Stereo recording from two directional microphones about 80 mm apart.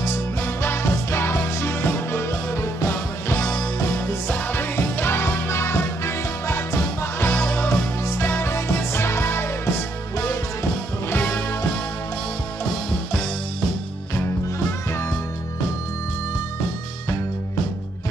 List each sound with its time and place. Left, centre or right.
0.0 s music: left
3.3 s music: centre
3.8 s music: left
8.0 s music: left